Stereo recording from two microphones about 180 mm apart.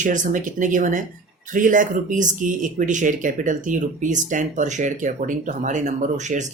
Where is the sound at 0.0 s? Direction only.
45° right (ahead or behind).